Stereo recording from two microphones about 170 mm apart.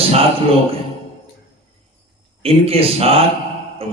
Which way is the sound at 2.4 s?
35° right (ahead or behind).